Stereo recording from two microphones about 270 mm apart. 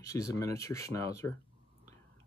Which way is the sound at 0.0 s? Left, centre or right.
Centre.